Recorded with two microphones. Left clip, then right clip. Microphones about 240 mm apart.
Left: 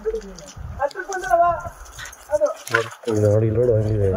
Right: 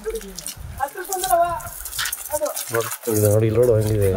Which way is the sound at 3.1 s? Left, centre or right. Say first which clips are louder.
Even; right.